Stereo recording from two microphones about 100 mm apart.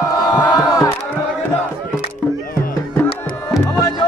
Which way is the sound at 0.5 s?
35° left (ahead or behind).